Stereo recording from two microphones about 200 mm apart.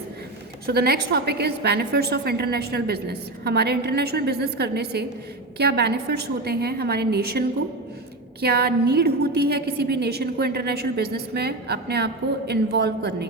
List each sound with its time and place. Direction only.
0.7 s a woman's voice: 55° right (ahead or behind)